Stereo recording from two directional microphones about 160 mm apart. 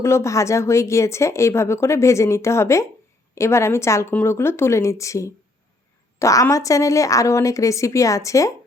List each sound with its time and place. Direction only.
0.0 s speech: 15° left (ahead or behind)